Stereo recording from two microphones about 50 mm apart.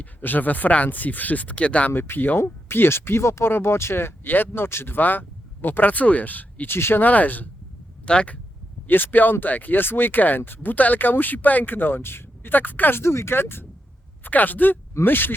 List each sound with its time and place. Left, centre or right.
0.0 s speech: left
1.9 s speech: left
2.4 s speech: left
6.7 s speech: left
7.0 s speech: left
8.0 s speech: left
8.9 s speech: left
13.0 s speech: left
14.3 s speech: left